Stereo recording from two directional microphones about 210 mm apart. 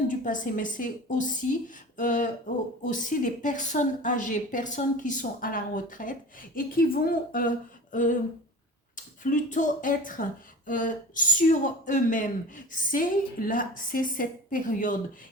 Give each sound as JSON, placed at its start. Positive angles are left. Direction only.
{"t": 0.3, "sound": "a woman's voice", "side_deg": 40}
{"t": 9.2, "sound": "a woman's voice", "side_deg": 35}